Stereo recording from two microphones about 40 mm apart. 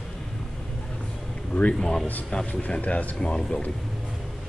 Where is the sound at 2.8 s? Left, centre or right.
Left.